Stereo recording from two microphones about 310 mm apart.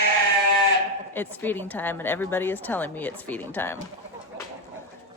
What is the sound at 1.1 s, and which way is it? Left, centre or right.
A woman's voice, centre.